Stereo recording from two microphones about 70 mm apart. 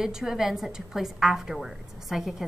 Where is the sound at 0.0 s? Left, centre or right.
Centre.